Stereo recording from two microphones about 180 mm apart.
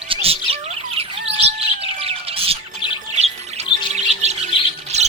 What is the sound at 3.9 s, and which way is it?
Music, 40° right (ahead or behind).